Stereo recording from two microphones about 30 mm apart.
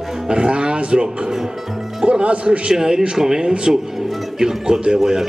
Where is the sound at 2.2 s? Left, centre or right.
Right.